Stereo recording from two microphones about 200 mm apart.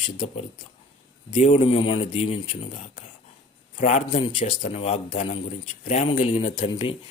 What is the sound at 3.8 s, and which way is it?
A man's voice, 40° left (ahead or behind).